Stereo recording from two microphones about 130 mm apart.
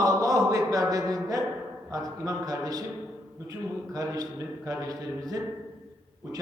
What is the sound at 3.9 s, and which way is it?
A man's voice, 25° right (ahead or behind).